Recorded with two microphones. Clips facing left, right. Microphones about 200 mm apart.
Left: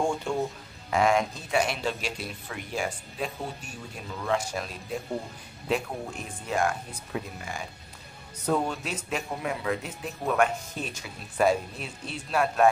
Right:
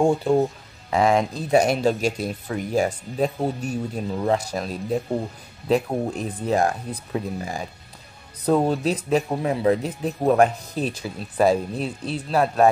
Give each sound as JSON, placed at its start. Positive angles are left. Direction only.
{"t": 0.0, "sound": "speech", "side_deg": -35}